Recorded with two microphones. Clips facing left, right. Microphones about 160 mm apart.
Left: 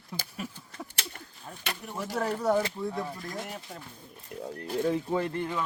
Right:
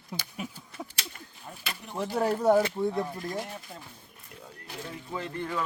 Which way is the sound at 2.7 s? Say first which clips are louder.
Right 4 dB; 30° right (ahead or behind).